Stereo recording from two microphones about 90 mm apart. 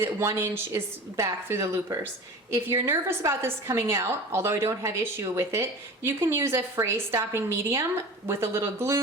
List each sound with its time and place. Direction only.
0.0 s a woman's voice: 30° right (ahead or behind)